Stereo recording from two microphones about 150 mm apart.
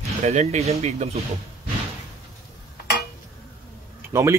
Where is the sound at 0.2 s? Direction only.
45° right (ahead or behind).